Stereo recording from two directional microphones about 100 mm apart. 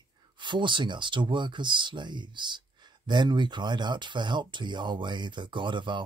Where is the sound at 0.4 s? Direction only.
50° right (ahead or behind).